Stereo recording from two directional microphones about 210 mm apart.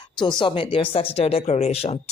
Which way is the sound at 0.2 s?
20° left (ahead or behind).